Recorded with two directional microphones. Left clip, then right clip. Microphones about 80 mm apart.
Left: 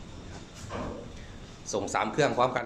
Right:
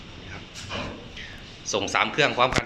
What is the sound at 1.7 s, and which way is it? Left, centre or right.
Speech, centre.